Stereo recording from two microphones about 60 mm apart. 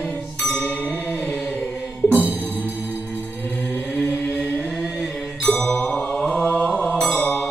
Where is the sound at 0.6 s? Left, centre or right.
Left.